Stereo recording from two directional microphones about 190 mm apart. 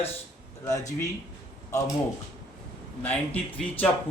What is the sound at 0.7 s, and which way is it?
Speech, 15° left (ahead or behind).